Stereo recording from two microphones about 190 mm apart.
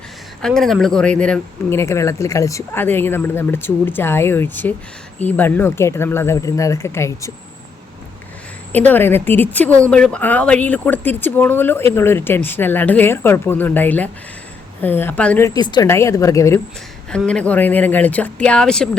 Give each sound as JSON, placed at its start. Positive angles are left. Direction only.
{"t": 0.4, "sound": "speech", "side_deg": 0}
{"t": 8.7, "sound": "speech", "side_deg": 10}
{"t": 17.1, "sound": "speech", "side_deg": 5}